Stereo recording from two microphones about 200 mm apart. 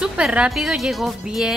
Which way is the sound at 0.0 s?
5° right (ahead or behind).